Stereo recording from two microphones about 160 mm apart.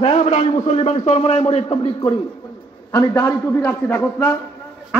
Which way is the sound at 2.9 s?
20° left (ahead or behind).